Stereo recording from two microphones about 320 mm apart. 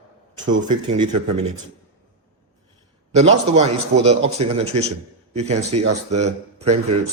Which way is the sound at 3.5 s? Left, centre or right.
Centre.